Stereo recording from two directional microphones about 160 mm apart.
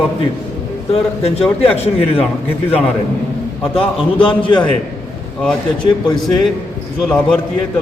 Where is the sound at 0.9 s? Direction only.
40° left (ahead or behind).